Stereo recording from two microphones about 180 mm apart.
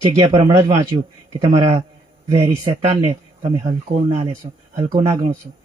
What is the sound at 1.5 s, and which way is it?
Speech, 35° right (ahead or behind).